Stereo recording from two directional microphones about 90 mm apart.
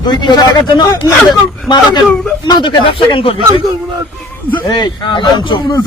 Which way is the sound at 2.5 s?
60° left (ahead or behind).